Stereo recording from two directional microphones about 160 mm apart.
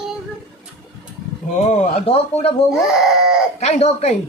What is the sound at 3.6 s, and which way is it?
Speech, 45° left (ahead or behind).